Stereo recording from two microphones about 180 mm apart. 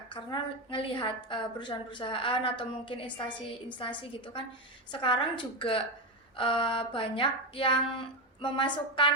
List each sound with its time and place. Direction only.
0.1 s a woman's voice: 25° left (ahead or behind)